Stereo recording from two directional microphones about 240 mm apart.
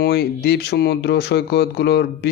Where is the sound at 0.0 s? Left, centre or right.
Left.